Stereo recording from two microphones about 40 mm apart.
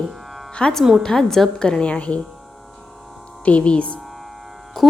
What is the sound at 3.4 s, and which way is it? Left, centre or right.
Speech, left.